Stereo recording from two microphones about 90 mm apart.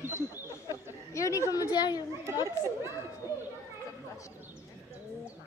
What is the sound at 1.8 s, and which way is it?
Speech, 45° left (ahead or behind).